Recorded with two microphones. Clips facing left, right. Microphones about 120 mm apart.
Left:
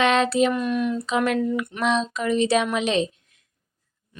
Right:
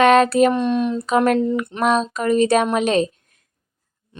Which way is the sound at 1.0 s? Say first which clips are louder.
Right 5 dB; 45° right (ahead or behind).